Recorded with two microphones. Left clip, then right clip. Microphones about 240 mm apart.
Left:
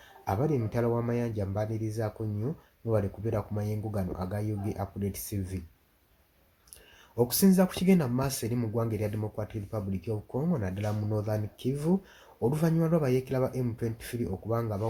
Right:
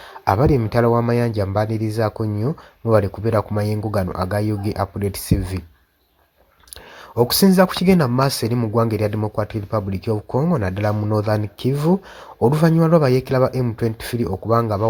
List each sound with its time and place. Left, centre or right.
0.3 s speech: right
7.2 s speech: right